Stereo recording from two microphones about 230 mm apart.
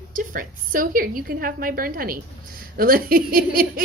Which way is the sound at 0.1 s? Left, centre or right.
Right.